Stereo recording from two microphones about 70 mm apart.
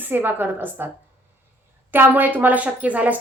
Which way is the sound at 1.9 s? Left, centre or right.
Right.